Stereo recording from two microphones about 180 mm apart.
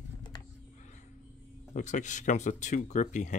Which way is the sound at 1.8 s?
45° left (ahead or behind).